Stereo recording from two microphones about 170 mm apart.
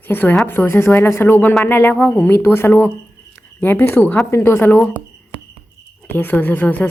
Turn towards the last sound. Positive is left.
turn(degrees=10)  # may be behind; listen again after turning